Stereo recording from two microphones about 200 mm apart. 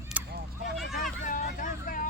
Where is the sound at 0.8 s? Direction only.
Centre (ahead or behind).